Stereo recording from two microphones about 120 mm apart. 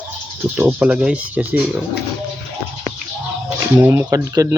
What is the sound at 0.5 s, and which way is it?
Speech, 10° right (ahead or behind).